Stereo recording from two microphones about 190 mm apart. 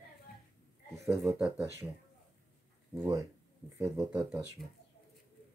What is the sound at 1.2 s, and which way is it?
Speech, centre (ahead or behind).